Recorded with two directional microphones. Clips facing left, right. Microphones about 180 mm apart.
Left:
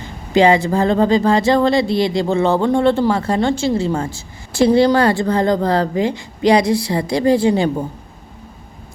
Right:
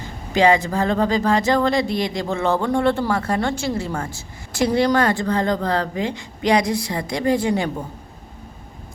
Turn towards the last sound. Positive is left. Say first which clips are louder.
# left 5 dB
turn(degrees=30)  # may be behind; listen again after turning